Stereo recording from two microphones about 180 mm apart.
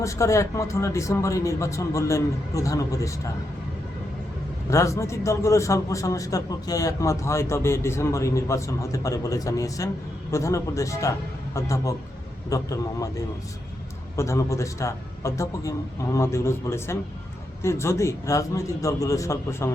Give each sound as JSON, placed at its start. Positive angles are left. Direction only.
{"t": 0.0, "sound": "a man's voice", "side_deg": 15}
{"t": 4.7, "sound": "a man's voice", "side_deg": 15}